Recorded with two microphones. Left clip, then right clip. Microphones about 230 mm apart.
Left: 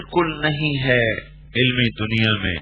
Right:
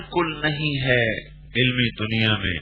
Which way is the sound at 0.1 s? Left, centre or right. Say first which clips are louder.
Left 3 dB; centre.